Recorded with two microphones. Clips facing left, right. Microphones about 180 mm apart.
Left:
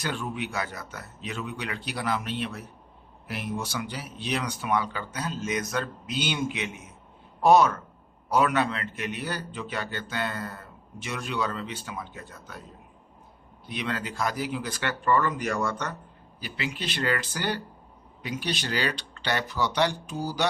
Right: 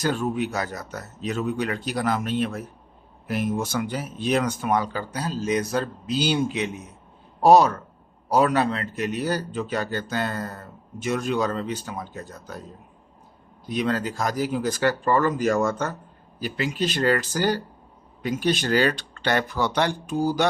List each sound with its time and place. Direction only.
0.0 s a man's voice: 40° right (ahead or behind)
13.7 s a man's voice: 40° right (ahead or behind)
15.5 s speech: 45° right (ahead or behind)